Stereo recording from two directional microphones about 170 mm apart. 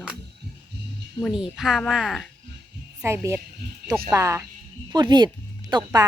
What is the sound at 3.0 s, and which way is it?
Speech, 15° right (ahead or behind).